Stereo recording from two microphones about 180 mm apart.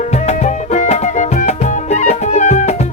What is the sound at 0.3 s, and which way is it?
Music, 40° left (ahead or behind).